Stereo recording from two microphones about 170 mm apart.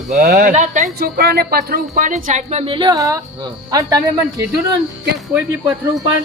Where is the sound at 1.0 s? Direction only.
65° right (ahead or behind).